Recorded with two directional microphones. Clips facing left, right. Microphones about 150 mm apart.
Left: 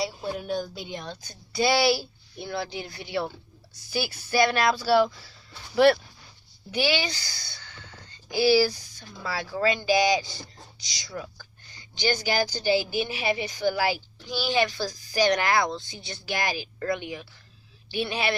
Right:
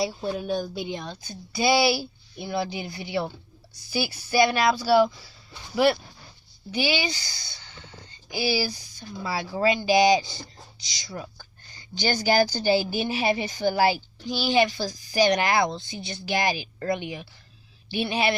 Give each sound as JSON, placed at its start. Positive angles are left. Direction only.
{"t": 0.3, "sound": "speech", "side_deg": -15}
{"t": 1.1, "sound": "speech", "side_deg": -5}
{"t": 7.3, "sound": "speech", "side_deg": -20}
{"t": 12.0, "sound": "speech", "side_deg": -40}
{"t": 14.3, "sound": "speech", "side_deg": -20}